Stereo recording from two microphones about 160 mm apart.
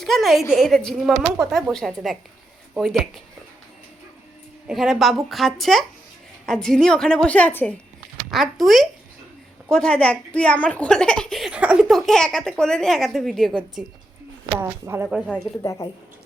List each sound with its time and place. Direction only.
0.0 s a woman's voice: centre (ahead or behind)
4.7 s a woman's voice: centre (ahead or behind)
8.3 s a woman's voice: centre (ahead or behind)
14.5 s speech: 15° right (ahead or behind)
15.6 s a woman's voice: 20° left (ahead or behind)